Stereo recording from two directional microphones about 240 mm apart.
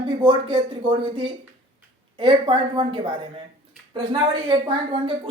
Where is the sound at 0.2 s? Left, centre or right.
Right.